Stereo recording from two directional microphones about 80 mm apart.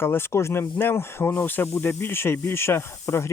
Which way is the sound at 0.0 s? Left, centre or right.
Left.